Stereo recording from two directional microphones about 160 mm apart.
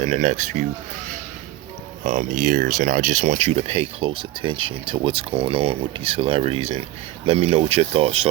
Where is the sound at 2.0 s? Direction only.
50° right (ahead or behind).